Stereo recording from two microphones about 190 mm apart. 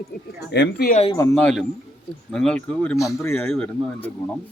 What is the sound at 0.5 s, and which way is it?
Speech, 65° left (ahead or behind).